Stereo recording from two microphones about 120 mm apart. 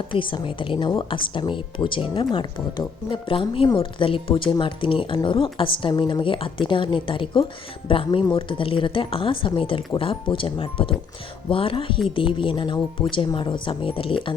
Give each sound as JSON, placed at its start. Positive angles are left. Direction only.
{"t": 0.1, "sound": "a woman's voice", "side_deg": 45}